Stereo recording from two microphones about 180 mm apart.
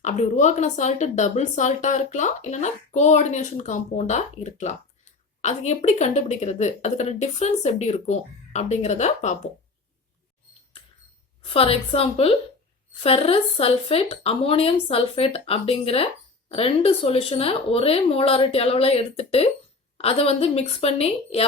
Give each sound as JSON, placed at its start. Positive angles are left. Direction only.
{"t": 0.0, "sound": "speech", "side_deg": 40}
{"t": 11.4, "sound": "speech", "side_deg": 30}